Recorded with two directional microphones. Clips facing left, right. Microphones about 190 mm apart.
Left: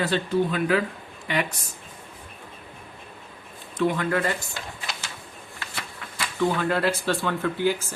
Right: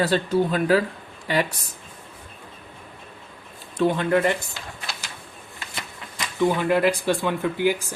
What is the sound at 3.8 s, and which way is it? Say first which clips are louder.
Speech: right 3 dB; 30° right (ahead or behind).